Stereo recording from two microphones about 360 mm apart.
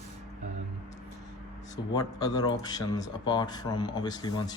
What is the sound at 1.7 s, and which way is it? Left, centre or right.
Speech, centre.